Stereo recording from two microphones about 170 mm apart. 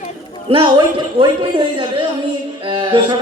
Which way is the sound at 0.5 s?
25° right (ahead or behind).